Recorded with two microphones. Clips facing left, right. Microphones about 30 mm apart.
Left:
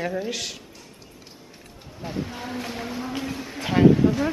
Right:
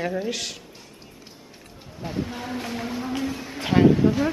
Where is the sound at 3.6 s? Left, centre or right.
Centre.